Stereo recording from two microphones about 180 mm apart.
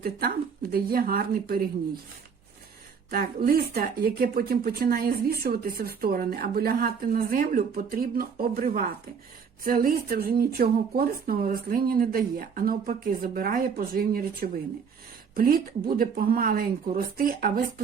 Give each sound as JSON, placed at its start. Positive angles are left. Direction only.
{"t": 0.0, "sound": "speech", "side_deg": -55}
{"t": 3.1, "sound": "speech", "side_deg": -50}
{"t": 9.6, "sound": "speech", "side_deg": -50}